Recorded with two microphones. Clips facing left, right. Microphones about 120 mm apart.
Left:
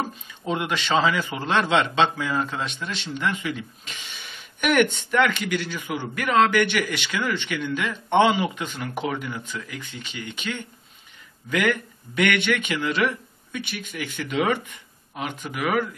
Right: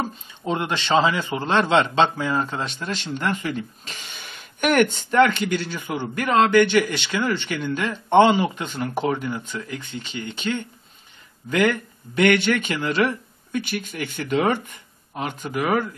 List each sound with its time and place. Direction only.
0.5 s speech: 30° right (ahead or behind)